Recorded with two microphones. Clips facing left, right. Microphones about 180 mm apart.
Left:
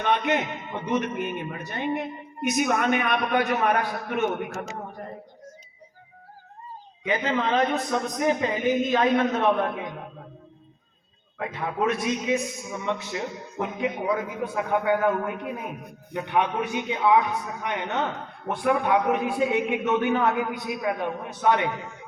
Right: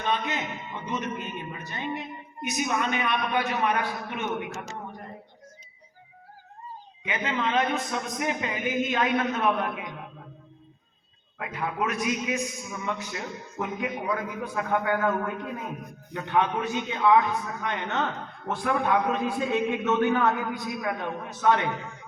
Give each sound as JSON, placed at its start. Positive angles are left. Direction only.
{"t": 0.0, "sound": "a man's voice", "side_deg": 60}
{"t": 7.1, "sound": "a man's voice", "side_deg": 35}
{"t": 11.3, "sound": "a man's voice", "side_deg": 30}